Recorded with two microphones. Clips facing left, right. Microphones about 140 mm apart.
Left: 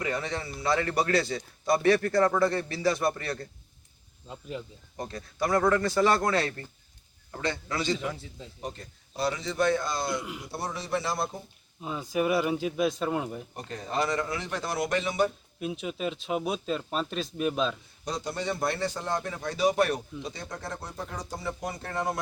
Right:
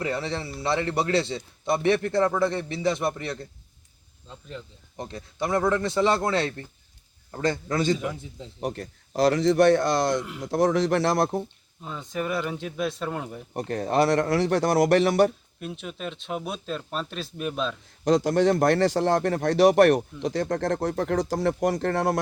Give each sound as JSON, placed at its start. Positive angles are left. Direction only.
{"t": 0.0, "sound": "a man's voice", "side_deg": -30}
{"t": 4.3, "sound": "speech", "side_deg": 10}
{"t": 4.9, "sound": "a man's voice", "side_deg": -25}
{"t": 7.4, "sound": "a man's voice", "side_deg": -45}
{"t": 8.6, "sound": "speech", "side_deg": -80}
{"t": 10.2, "sound": "speech", "side_deg": 0}
{"t": 10.4, "sound": "speech", "side_deg": -90}
{"t": 11.8, "sound": "speech", "side_deg": 5}
{"t": 13.6, "sound": "speech", "side_deg": -70}
{"t": 15.6, "sound": "speech", "side_deg": 0}
{"t": 18.0, "sound": "speech", "side_deg": -90}
{"t": 20.2, "sound": "speech", "side_deg": -90}